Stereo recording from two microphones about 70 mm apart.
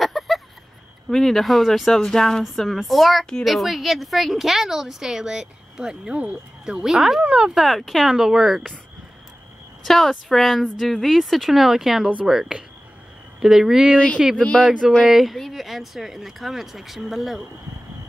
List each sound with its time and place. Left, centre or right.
0.0 s a sound: centre
1.1 s speech: centre
7.6 s speech: centre
9.8 s speech: centre
13.9 s speech: centre
15.0 s speech: centre